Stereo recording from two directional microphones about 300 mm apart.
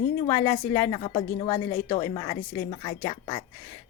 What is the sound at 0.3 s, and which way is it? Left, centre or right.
Speech, centre.